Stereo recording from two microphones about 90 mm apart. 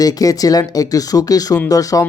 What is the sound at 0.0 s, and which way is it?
Speech, 45° left (ahead or behind).